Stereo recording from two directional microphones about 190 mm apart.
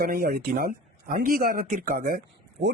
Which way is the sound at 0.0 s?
50° right (ahead or behind).